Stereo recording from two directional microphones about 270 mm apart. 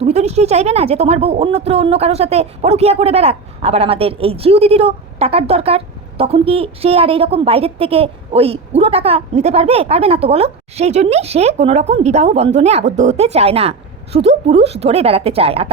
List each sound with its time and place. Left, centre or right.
0.0 s speech: right